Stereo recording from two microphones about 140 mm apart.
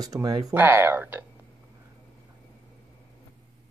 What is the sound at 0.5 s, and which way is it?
Speech, 15° right (ahead or behind).